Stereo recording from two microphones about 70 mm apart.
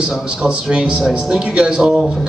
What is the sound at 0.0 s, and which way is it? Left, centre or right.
A man's voice, centre.